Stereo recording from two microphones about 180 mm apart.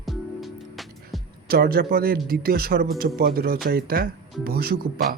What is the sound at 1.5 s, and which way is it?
Speech, 60° right (ahead or behind).